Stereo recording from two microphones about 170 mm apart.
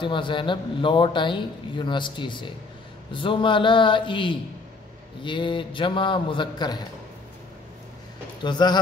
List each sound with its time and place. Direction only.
0.0 s a man's voice: 30° left (ahead or behind)
8.5 s a man's voice: 25° left (ahead or behind)